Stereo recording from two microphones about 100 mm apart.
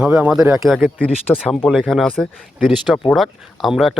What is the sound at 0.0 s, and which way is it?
Speech, 10° right (ahead or behind).